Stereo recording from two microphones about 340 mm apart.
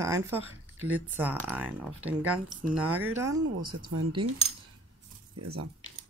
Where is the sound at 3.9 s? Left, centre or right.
Right.